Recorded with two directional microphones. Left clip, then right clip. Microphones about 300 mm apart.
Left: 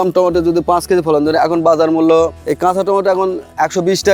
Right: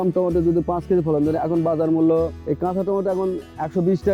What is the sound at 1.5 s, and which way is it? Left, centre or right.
A man's voice, left.